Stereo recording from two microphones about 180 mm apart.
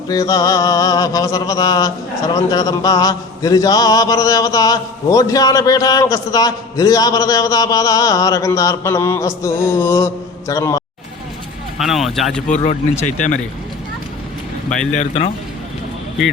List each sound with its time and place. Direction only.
0.1 s mantra: 20° left (ahead or behind)
11.8 s speech: centre (ahead or behind)
12.5 s speech: 40° left (ahead or behind)
14.9 s speech: 35° left (ahead or behind)